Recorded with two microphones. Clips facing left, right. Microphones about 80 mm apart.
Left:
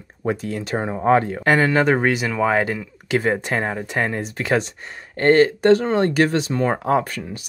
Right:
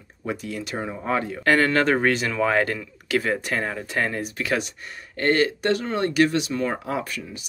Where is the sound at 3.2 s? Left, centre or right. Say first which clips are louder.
Left 5 dB; left.